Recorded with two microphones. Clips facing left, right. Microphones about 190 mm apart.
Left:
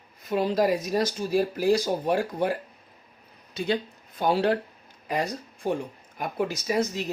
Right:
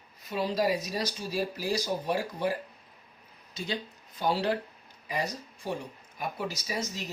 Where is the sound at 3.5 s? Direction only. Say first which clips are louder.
Left 8 dB; 60° left (ahead or behind).